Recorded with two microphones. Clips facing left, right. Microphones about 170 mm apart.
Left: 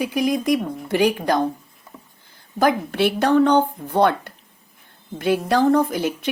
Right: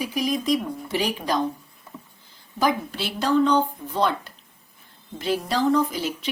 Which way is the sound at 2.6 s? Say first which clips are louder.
Left 5 dB; 60° left (ahead or behind).